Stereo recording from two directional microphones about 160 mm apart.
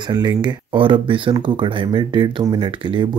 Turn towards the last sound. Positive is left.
turn(degrees=-30)  # may be behind; listen again after turning